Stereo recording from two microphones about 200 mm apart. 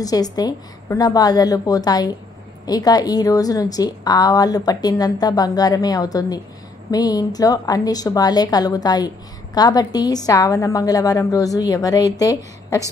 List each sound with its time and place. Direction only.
0.0 s a woman's voice: 20° left (ahead or behind)